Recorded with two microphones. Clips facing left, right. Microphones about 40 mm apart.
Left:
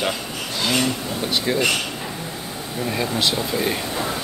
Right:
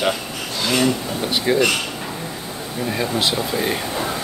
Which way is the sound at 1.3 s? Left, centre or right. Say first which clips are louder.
Right 4 dB; centre.